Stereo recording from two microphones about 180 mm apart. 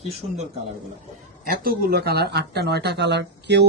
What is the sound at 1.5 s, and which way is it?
Speech, 55° right (ahead or behind).